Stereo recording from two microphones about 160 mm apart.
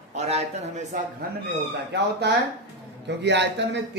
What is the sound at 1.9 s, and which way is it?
Speech, 90° right.